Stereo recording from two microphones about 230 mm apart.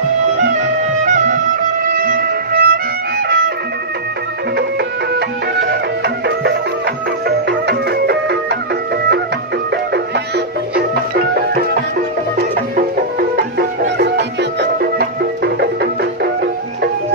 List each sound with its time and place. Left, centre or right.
0.6 s music: right
5.6 s music: right
9.9 s music: right